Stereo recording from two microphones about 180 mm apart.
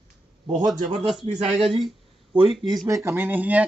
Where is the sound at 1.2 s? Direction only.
30° right (ahead or behind).